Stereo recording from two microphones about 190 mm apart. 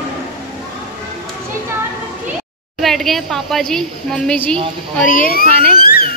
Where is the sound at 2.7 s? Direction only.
Centre (ahead or behind).